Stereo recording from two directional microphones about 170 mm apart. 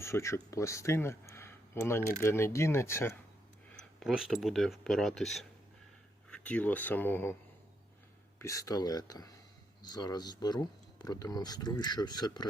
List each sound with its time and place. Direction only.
0.0 s speech: 15° left (ahead or behind)
4.0 s speech: centre (ahead or behind)
8.4 s speech: 20° left (ahead or behind)